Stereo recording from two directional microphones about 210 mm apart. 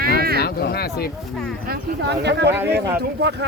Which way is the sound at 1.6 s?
45° right (ahead or behind).